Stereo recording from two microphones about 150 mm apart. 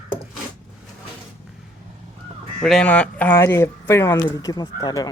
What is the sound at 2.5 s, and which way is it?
Speech, 5° left (ahead or behind).